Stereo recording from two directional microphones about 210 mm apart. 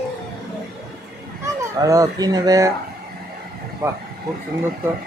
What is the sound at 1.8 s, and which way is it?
Speech, 15° right (ahead or behind).